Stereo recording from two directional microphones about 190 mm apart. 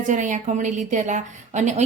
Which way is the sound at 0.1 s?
40° right (ahead or behind).